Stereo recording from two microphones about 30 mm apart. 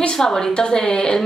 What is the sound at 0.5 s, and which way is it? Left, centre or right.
Speech, left.